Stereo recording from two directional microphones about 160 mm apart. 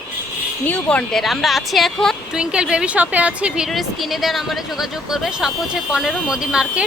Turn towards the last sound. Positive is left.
turn(degrees=-5)  # may be behind; listen again after turning